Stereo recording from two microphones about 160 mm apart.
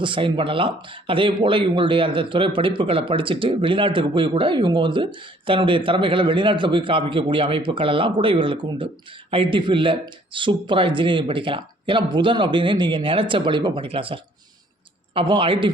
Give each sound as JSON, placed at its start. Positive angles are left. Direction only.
{"t": 0.0, "sound": "speech", "side_deg": -30}